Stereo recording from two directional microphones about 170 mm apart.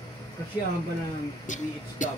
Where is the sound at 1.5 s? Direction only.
45° left (ahead or behind).